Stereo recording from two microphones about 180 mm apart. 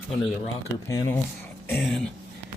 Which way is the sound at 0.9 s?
20° left (ahead or behind).